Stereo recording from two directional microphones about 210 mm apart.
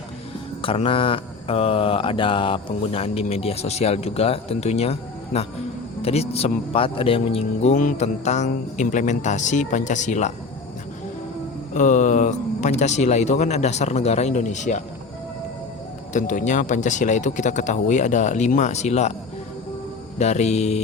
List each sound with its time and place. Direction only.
0.6 s mantra: 25° left (ahead or behind)
6.0 s speech: 30° left (ahead or behind)
11.7 s speech: 35° left (ahead or behind)
16.1 s speech: 35° left (ahead or behind)
20.1 s speech: 30° left (ahead or behind)